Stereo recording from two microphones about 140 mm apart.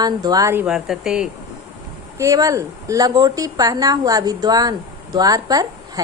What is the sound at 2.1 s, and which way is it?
A woman's voice, 25° right (ahead or behind).